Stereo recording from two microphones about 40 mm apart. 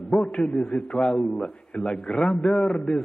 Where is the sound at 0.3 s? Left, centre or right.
Left.